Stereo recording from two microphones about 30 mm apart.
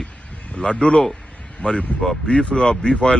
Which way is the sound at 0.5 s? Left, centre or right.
Left.